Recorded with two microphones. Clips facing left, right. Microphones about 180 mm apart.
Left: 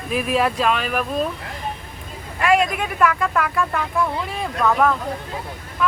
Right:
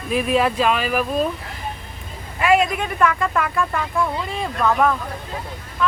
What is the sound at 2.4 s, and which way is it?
Speech, centre (ahead or behind).